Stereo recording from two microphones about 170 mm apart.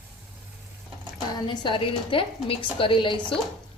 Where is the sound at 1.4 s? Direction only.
30° left (ahead or behind).